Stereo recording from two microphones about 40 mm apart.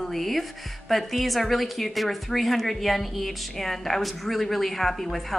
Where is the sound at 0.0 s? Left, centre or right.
Centre.